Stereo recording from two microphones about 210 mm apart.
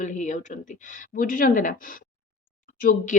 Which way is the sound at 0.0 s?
35° left (ahead or behind).